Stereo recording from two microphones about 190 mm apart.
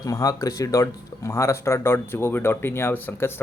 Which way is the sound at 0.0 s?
20° left (ahead or behind).